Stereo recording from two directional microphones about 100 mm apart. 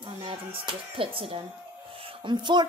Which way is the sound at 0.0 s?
65° right (ahead or behind).